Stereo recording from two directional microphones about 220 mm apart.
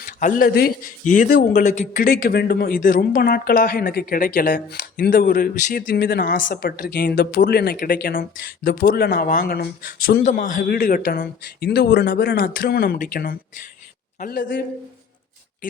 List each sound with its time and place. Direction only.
0.0 s speech: 40° left (ahead or behind)